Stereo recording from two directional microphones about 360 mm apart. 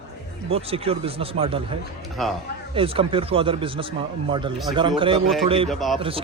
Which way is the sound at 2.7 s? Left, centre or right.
Centre.